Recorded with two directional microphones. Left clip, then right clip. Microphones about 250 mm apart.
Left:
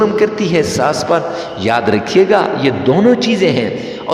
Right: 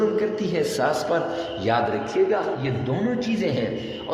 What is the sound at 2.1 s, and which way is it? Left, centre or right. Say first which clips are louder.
A man's voice: left 11 dB; left.